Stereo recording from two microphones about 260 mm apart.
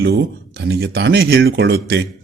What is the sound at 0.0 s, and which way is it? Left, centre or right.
Speech, right.